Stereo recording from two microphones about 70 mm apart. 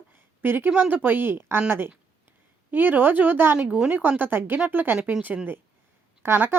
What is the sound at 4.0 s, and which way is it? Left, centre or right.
Speech, right.